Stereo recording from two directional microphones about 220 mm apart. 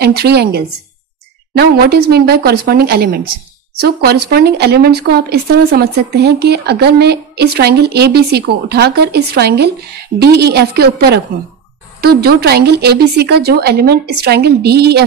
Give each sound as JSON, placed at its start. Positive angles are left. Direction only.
{"t": 0.0, "sound": "speech", "side_deg": -45}